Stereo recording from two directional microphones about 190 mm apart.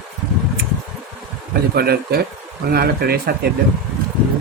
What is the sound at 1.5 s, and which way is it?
Speech, 55° right (ahead or behind).